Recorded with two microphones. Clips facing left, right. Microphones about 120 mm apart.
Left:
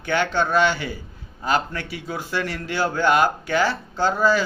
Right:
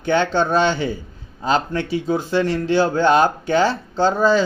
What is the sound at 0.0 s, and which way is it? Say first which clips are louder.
Speech: right 4 dB; 25° right (ahead or behind).